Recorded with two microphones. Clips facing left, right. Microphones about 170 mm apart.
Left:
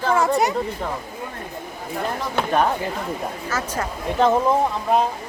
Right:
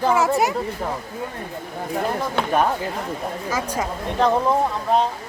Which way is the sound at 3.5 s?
10° right (ahead or behind).